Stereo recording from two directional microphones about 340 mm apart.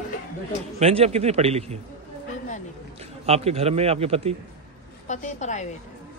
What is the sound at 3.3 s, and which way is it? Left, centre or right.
A man's voice, centre.